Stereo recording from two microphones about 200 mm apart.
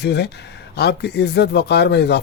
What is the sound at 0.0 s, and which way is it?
Speech, 55° left (ahead or behind).